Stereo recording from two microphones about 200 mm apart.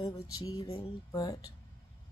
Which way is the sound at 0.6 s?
30° left (ahead or behind).